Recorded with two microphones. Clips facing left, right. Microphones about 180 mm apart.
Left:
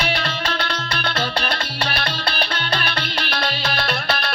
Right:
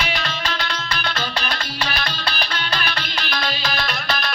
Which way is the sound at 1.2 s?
60° left (ahead or behind).